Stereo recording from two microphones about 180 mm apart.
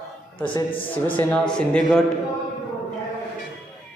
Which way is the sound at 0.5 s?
30° left (ahead or behind).